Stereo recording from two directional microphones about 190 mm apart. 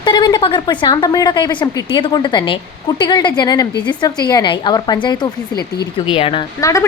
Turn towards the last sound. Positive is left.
turn(degrees=15)  # may be behind; listen again after turning